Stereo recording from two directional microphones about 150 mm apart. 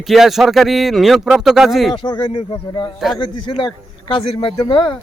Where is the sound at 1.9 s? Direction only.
30° left (ahead or behind).